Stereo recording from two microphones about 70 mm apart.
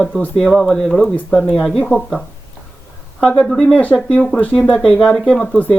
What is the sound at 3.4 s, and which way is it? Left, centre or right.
Speech, centre.